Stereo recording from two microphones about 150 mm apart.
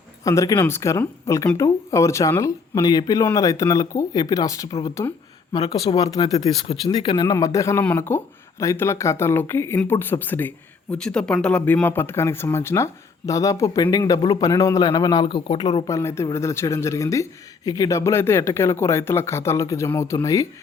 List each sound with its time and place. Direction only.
0.3 s speech: 25° left (ahead or behind)
7.3 s speech: 20° left (ahead or behind)
15.9 s speech: 20° left (ahead or behind)